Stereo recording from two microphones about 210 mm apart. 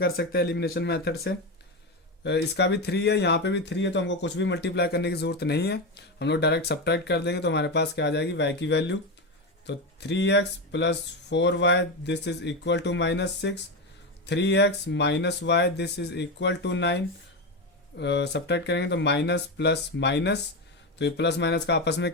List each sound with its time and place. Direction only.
0.0 s speech: 50° left (ahead or behind)